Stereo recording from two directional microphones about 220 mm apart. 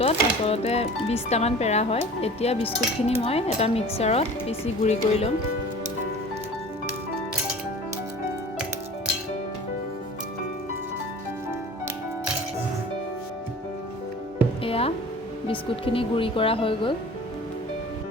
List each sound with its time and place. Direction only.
0.0 s speech: 25° left (ahead or behind)
14.6 s music: 25° left (ahead or behind)
15.4 s speech: 25° left (ahead or behind)